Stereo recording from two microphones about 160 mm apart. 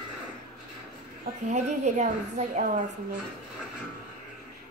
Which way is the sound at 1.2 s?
45° right (ahead or behind).